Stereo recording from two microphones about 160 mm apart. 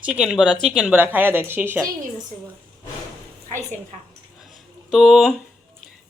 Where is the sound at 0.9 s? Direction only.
10° right (ahead or behind).